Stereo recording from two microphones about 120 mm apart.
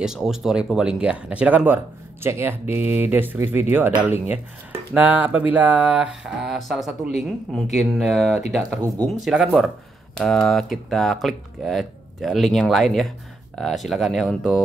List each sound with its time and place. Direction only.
0.0 s speech: 5° right (ahead or behind)
8.8 s speech: 30° right (ahead or behind)
9.2 s speech: 5° right (ahead or behind)